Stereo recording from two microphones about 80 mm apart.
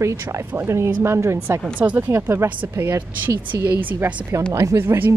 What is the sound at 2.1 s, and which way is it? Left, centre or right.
A woman's voice, right.